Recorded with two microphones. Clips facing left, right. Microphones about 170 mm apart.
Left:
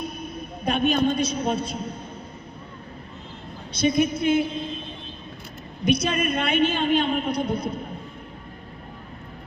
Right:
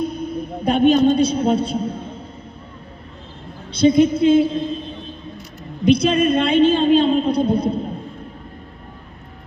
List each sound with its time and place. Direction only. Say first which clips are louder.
0.0 s a sound: right 9 dB; 30° right (ahead or behind)
1.0 s a woman's voice: right 7 dB; 30° right (ahead or behind)
3.7 s a woman's voice: right 8 dB; 30° right (ahead or behind)
5.8 s a woman's voice: right 8 dB; 30° right (ahead or behind)